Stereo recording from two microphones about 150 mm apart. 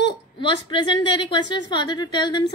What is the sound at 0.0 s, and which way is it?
A woman's voice, 30° left (ahead or behind).